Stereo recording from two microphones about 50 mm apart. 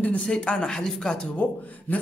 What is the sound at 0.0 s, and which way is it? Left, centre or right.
Speech, left.